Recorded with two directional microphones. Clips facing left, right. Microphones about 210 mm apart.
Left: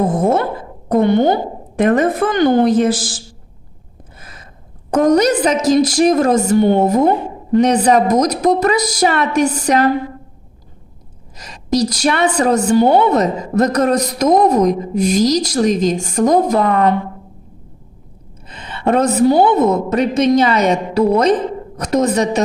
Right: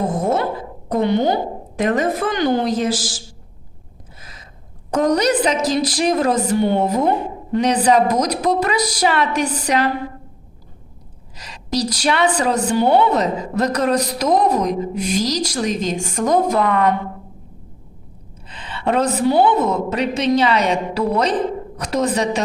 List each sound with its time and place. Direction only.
0.2 s a woman's voice: 55° left (ahead or behind)
4.2 s a sound: 55° left (ahead or behind)
4.9 s a woman's voice: 50° left (ahead or behind)
11.3 s a woman's voice: 45° left (ahead or behind)
18.4 s a woman's voice: 45° left (ahead or behind)